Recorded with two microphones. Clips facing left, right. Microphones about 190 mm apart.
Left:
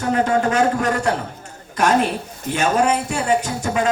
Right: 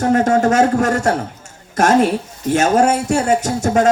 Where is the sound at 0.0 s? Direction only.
45° right (ahead or behind).